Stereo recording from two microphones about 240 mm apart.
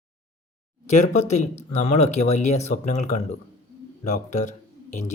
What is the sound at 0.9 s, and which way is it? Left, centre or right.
Speech, left.